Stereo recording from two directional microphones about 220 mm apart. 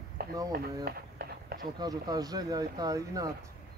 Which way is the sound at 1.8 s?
15° right (ahead or behind).